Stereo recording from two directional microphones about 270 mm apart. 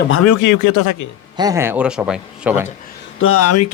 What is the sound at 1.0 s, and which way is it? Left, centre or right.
Speech, left.